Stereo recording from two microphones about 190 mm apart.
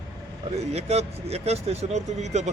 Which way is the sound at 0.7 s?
35° right (ahead or behind).